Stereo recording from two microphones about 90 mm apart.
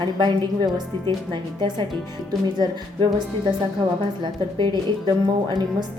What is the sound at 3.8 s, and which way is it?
A woman's voice, 50° right (ahead or behind).